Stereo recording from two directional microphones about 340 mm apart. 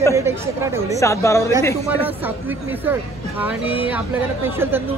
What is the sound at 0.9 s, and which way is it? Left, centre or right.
Speech, centre.